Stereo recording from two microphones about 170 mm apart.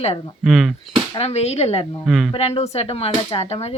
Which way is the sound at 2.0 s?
Centre (ahead or behind).